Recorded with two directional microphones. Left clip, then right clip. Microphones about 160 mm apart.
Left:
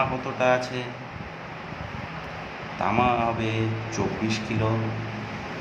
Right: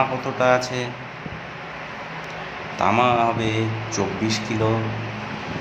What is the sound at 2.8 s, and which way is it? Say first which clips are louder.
Speech: right 5 dB; 30° right (ahead or behind).